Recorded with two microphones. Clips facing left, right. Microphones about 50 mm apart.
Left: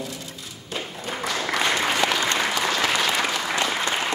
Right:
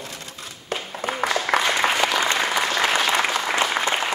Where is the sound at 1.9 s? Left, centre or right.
Centre.